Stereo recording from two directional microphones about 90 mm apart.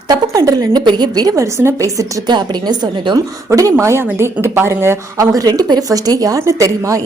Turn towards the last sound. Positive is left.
turn(degrees=-35)  # may be behind; listen again after turning